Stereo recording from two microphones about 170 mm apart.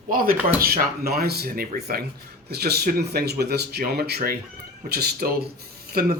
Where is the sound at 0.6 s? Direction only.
65° right (ahead or behind).